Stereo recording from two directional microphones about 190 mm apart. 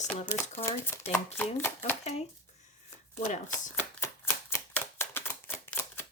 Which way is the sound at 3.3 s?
40° left (ahead or behind).